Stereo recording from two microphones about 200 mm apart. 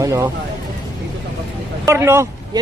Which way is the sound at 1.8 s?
15° right (ahead or behind).